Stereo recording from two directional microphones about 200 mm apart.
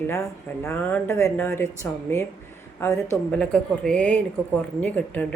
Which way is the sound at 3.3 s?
5° left (ahead or behind).